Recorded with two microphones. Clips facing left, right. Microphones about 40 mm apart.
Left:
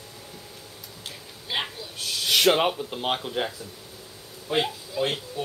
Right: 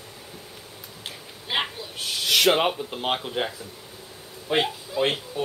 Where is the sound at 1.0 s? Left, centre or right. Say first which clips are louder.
Right 2 dB; right.